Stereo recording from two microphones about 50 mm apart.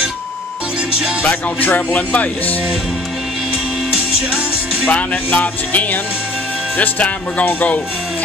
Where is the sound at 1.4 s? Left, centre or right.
Left.